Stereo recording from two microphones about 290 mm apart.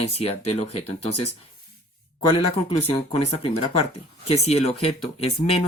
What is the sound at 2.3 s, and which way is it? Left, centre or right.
Speech, centre.